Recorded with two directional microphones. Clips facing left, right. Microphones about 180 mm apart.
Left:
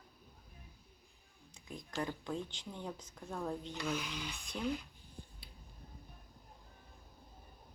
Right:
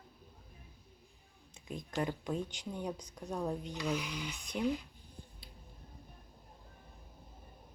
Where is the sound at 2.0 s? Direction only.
20° right (ahead or behind).